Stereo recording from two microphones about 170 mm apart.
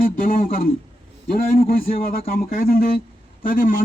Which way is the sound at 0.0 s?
55° left (ahead or behind).